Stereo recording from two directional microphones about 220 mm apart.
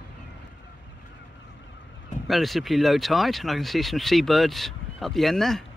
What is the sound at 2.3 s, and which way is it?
Speech, centre (ahead or behind).